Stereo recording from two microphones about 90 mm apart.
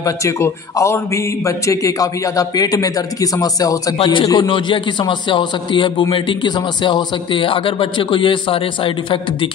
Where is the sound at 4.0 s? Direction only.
65° left (ahead or behind).